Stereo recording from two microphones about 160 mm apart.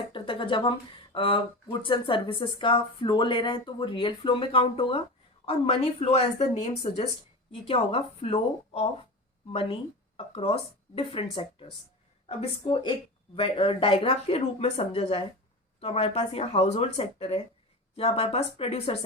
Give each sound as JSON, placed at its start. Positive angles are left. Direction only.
{"t": 0.1, "sound": "speech", "side_deg": 30}